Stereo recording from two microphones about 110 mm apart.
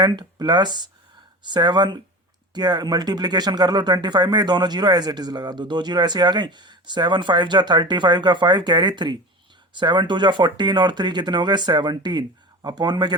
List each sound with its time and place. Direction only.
0.0 s speech: 40° right (ahead or behind)